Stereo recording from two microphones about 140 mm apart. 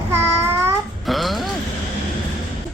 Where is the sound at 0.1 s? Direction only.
15° right (ahead or behind).